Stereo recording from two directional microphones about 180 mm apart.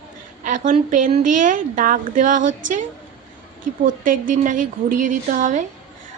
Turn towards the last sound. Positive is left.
turn(degrees=-45)  # may be behind; listen again after turning